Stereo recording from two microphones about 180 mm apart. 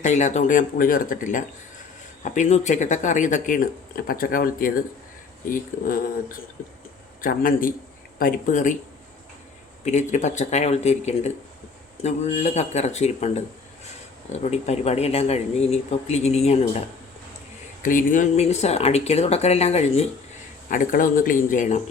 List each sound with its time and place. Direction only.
0.0 s speech: 40° left (ahead or behind)
9.8 s speech: 40° left (ahead or behind)
17.8 s speech: 45° left (ahead or behind)
20.7 s speech: 50° left (ahead or behind)